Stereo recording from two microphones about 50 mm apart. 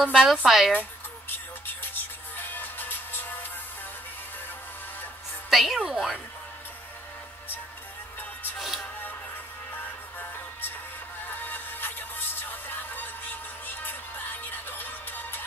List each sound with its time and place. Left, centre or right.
0.0 s a woman's voice: centre
1.7 s music: left
5.5 s a woman's voice: centre
8.5 s music: centre
9.8 s music: left